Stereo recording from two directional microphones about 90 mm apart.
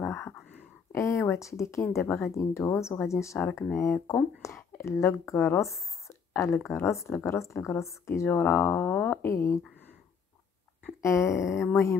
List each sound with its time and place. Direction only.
0.0 s whispering: 25° left (ahead or behind)
0.9 s speech: 35° left (ahead or behind)
6.0 s a sound: 30° left (ahead or behind)
6.7 s speech: 30° left (ahead or behind)
11.0 s speech: 35° left (ahead or behind)